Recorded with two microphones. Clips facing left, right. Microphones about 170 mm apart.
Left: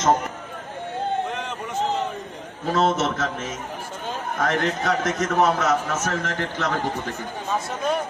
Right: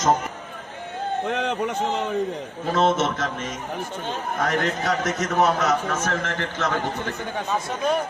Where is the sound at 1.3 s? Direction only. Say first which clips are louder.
Right 6 dB; 70° right (ahead or behind).